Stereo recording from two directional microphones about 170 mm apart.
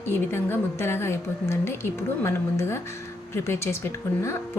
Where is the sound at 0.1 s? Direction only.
15° left (ahead or behind).